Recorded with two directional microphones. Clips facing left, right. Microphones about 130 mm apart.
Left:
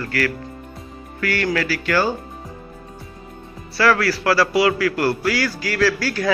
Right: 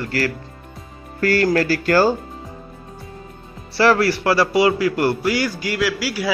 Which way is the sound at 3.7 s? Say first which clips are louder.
Right 2 dB; 25° right (ahead or behind).